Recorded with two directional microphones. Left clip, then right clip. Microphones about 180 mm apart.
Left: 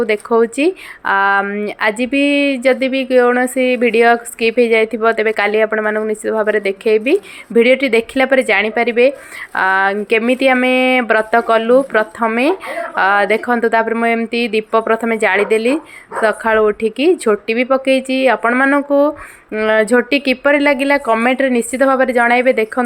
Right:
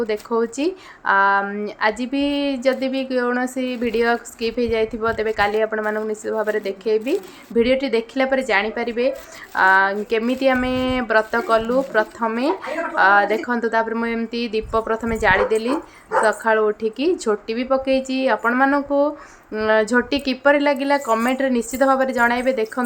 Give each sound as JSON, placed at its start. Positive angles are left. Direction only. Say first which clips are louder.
{"t": 0.0, "sound": "a woman's voice", "louder": "left 8 dB", "side_deg": 20}